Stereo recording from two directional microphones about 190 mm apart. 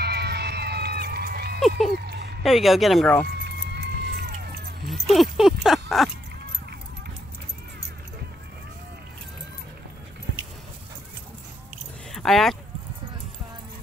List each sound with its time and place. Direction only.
0.0 s a sound: 60° right (ahead or behind)
2.4 s speech: centre (ahead or behind)
3.4 s music: 60° right (ahead or behind)
4.8 s speech: centre (ahead or behind)
12.1 s keys jangling: centre (ahead or behind)